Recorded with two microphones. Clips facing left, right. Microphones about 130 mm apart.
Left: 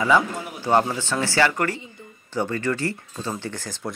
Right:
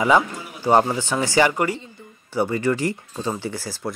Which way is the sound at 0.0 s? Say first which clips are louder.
Right 2 dB; 15° right (ahead or behind).